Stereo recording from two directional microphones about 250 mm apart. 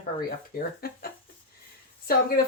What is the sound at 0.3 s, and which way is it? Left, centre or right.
Speech, left.